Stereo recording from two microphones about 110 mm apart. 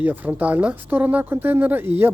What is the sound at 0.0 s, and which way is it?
A woman's voice, 15° right (ahead or behind).